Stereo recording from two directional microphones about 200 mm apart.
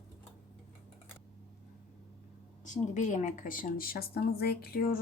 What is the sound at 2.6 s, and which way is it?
Speech, 40° left (ahead or behind).